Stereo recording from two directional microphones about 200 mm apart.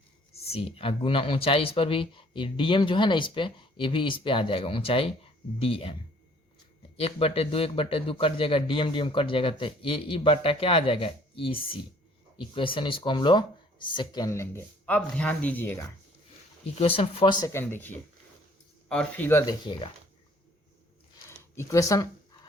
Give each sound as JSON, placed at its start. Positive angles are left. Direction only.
{"t": 0.3, "sound": "speech", "side_deg": 30}
{"t": 16.6, "sound": "speech", "side_deg": 30}
{"t": 17.4, "sound": "speech", "side_deg": 15}
{"t": 21.2, "sound": "a sound", "side_deg": 15}